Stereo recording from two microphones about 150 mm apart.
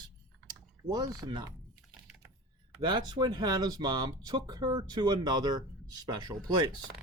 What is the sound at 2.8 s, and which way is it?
Speech, 30° right (ahead or behind).